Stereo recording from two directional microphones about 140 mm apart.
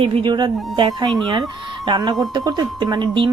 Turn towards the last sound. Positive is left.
turn(degrees=-30)  # may be behind; listen again after turning